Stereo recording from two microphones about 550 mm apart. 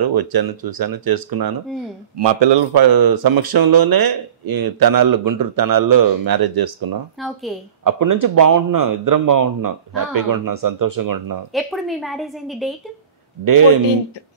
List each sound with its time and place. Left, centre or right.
0.0 s speech: right
7.2 s a woman's voice: centre
7.8 s speech: right
11.5 s a woman's voice: centre
13.4 s speech: right